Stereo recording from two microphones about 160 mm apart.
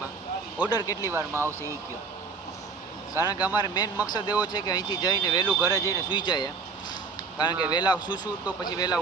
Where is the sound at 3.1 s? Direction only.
25° left (ahead or behind).